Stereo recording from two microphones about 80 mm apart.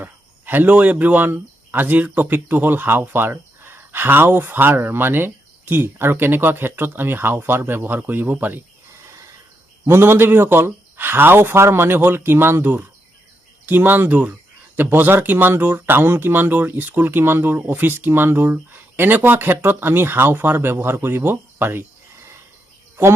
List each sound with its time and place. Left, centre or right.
0.0 s speech: right
9.8 s speech: right